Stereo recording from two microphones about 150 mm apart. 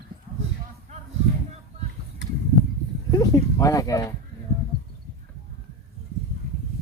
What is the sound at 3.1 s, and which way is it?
Speech, 25° left (ahead or behind).